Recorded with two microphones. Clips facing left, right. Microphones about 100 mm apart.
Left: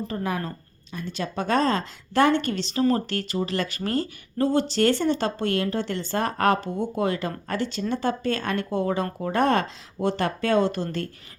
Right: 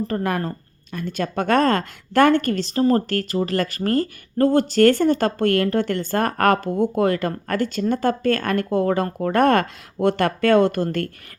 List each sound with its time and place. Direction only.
0.1 s a woman's voice: 55° right (ahead or behind)